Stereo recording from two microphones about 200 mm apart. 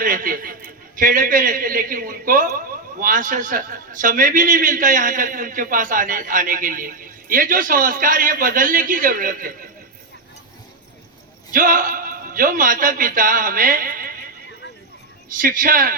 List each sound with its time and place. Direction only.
0.0 s a man's voice: 45° right (ahead or behind)
11.5 s a man's voice: 45° right (ahead or behind)
15.3 s a man's voice: 45° right (ahead or behind)